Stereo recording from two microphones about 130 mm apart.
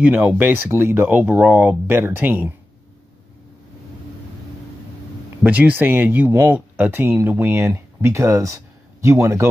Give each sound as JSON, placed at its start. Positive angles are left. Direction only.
{"t": 0.0, "sound": "speech", "side_deg": -10}
{"t": 5.4, "sound": "speech", "side_deg": -10}